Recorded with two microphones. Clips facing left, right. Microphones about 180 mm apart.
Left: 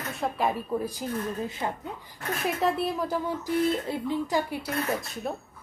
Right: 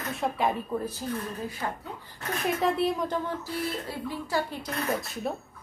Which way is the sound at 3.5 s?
20° left (ahead or behind).